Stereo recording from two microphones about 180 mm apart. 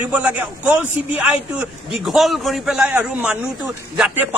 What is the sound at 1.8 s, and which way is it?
A man's voice, centre (ahead or behind).